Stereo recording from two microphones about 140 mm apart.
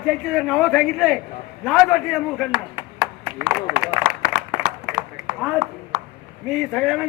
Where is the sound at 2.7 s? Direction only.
15° right (ahead or behind).